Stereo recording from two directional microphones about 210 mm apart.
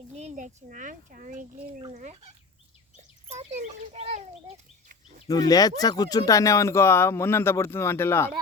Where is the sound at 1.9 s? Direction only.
35° right (ahead or behind).